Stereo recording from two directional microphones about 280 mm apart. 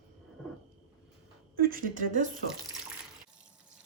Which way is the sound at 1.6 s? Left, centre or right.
Right.